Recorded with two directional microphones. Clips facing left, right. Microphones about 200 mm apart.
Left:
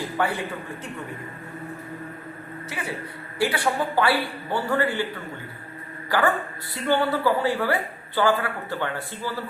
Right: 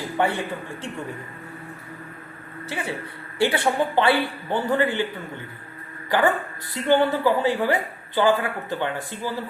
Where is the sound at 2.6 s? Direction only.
30° right (ahead or behind).